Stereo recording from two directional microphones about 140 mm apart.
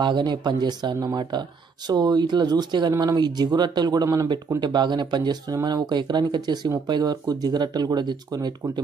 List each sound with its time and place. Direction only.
0.0 s speech: 35° right (ahead or behind)